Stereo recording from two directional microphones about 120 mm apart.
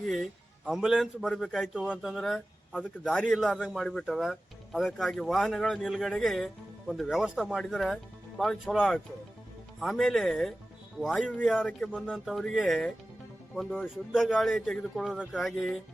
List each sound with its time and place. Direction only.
0.1 s a man's voice: centre (ahead or behind)
13.8 s a man's voice: 5° right (ahead or behind)